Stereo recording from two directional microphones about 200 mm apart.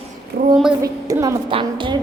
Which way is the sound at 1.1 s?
15° right (ahead or behind).